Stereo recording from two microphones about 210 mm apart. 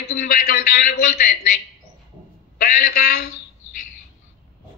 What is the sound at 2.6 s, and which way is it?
Speech, 40° left (ahead or behind).